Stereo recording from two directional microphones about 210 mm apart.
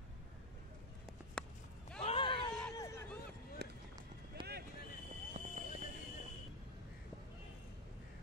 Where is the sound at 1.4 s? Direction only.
5° left (ahead or behind).